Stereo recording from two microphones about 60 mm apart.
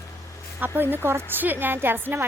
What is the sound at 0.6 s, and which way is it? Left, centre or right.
A woman's voice, right.